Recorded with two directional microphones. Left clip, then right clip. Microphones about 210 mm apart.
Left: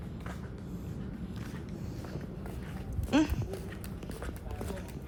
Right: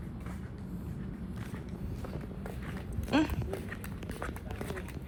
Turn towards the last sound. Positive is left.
turn(degrees=10)  # may be behind; listen again after turning